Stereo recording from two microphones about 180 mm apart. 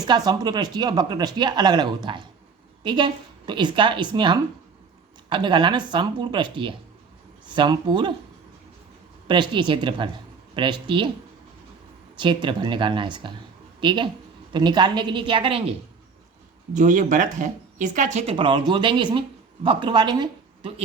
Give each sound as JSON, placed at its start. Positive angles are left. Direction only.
{"t": 0.3, "sound": "speech", "side_deg": -20}
{"t": 9.2, "sound": "speech", "side_deg": -25}
{"t": 12.1, "sound": "speech", "side_deg": -25}
{"t": 16.7, "sound": "speech", "side_deg": -45}